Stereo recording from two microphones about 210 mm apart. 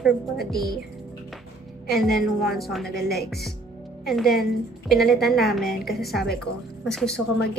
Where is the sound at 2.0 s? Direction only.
Centre (ahead or behind).